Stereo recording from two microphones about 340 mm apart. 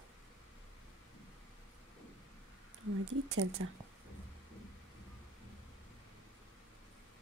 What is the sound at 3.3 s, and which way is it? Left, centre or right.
Speech, right.